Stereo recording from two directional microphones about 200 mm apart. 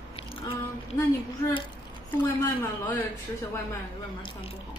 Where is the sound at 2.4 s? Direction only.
10° left (ahead or behind).